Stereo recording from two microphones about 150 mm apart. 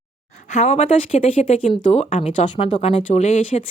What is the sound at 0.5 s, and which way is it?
Speech, 45° left (ahead or behind).